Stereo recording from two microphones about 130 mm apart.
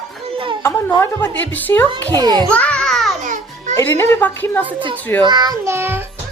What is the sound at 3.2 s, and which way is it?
Music, 80° right.